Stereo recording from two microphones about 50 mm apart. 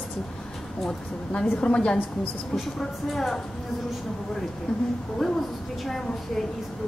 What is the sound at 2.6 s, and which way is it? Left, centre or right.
Speech, centre.